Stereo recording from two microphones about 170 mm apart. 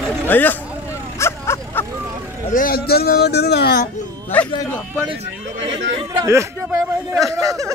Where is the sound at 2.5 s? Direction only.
55° left (ahead or behind).